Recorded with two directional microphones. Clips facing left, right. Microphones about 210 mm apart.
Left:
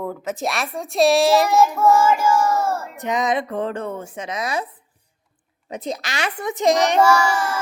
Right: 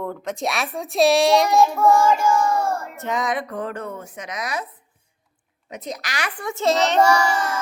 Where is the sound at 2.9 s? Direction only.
15° left (ahead or behind).